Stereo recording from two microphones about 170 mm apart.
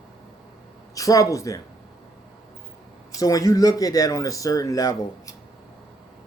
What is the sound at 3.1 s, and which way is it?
Speech, 20° left (ahead or behind).